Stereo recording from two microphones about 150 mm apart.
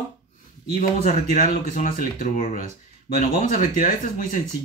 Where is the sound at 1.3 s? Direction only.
60° left (ahead or behind).